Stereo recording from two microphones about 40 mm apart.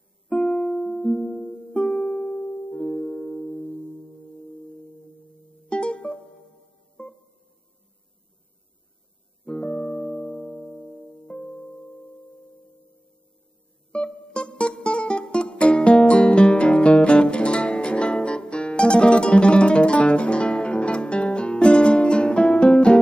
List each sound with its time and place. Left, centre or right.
0.4 s music: left
0.9 s music: centre
1.8 s music: centre
3.9 s singing bowl: centre
5.0 s music: centre
5.7 s music: left
7.0 s music: centre
9.4 s music: centre
14.2 s music: left